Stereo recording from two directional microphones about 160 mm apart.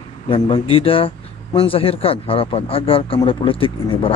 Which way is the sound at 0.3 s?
35° left (ahead or behind).